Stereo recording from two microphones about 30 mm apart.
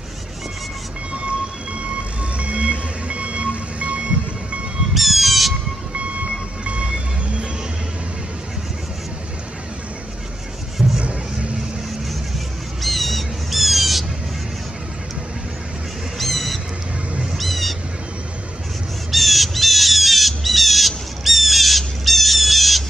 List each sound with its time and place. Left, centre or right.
2.3 s vehicle: right
4.9 s squawk: centre
5.9 s train: right
6.6 s vehicle: right
11.0 s music: right
12.8 s bird: centre
16.2 s bird: centre
19.1 s squawk: centre